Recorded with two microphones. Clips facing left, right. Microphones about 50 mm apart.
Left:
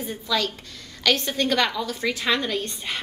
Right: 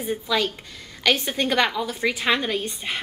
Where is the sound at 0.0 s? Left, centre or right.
Centre.